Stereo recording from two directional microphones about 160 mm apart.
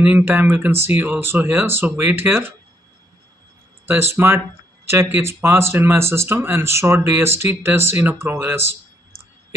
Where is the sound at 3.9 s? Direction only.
15° right (ahead or behind).